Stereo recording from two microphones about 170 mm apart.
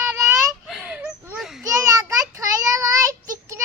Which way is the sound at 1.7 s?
20° right (ahead or behind).